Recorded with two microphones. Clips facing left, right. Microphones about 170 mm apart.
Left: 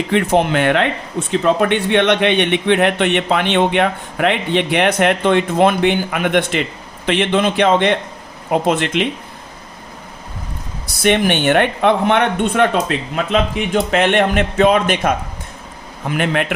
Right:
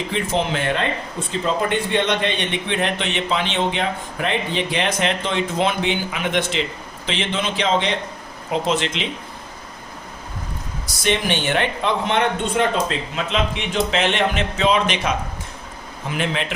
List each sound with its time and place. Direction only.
0.1 s a man's voice: 65° left (ahead or behind)
11.0 s a man's voice: 60° left (ahead or behind)